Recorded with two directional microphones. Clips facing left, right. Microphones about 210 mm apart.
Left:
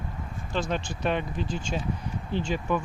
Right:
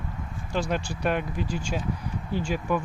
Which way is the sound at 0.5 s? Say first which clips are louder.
Right 1 dB; 10° right (ahead or behind).